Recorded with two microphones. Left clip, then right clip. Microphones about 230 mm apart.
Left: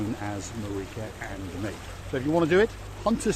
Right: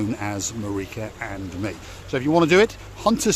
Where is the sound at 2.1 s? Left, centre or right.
Right.